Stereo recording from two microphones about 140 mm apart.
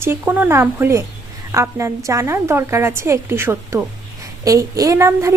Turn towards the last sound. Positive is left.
turn(degrees=-20)  # may be behind; listen again after turning